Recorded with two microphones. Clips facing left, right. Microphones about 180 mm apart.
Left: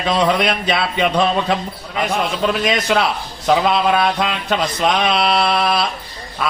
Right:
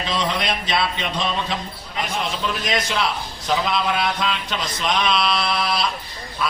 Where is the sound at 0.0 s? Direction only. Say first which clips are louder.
Left 7 dB; 65° left (ahead or behind).